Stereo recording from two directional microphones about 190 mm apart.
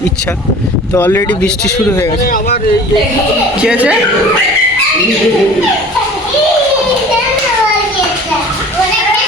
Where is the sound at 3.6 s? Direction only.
5° right (ahead or behind).